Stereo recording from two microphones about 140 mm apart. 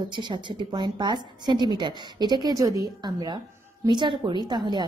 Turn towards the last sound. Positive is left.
turn(degrees=-30)  # may be behind; listen again after turning